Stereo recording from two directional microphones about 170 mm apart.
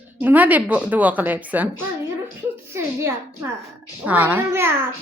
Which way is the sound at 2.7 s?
15° right (ahead or behind).